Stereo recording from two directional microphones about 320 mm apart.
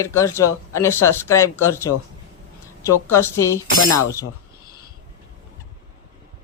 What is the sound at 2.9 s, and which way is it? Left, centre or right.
Speech, centre.